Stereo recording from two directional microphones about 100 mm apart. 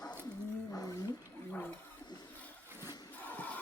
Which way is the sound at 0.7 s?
35° left (ahead or behind).